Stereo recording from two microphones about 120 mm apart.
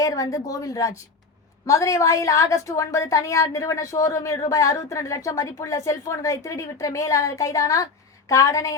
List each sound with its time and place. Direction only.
0.0 s a woman's voice: 30° left (ahead or behind)